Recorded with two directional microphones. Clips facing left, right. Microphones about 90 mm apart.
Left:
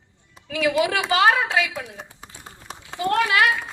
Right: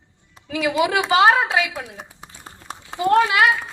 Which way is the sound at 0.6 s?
20° right (ahead or behind).